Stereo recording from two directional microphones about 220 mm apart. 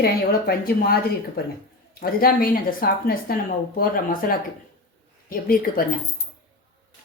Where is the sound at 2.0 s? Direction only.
40° left (ahead or behind).